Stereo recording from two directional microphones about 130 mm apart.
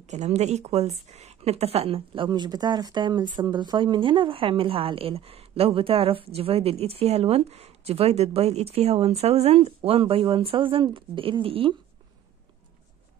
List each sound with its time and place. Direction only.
0.0 s a woman's voice: 60° right (ahead or behind); by 11.7 s 45° right (ahead or behind)